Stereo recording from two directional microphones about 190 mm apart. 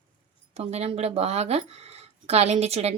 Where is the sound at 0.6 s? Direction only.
35° right (ahead or behind).